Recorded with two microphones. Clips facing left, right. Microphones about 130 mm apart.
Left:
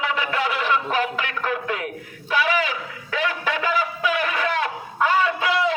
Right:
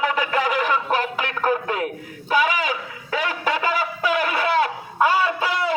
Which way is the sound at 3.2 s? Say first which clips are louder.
Right 1 dB; 40° right (ahead or behind).